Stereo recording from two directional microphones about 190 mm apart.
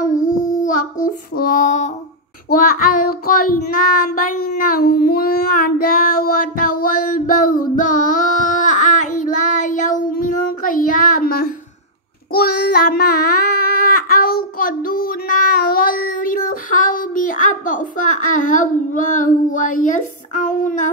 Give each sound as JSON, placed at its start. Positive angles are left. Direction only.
{"t": 0.3, "sound": "child singing", "side_deg": 20}
{"t": 0.7, "sound": "child singing", "side_deg": 45}